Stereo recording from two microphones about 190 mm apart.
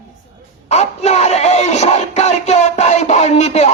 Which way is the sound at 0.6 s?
35° left (ahead or behind).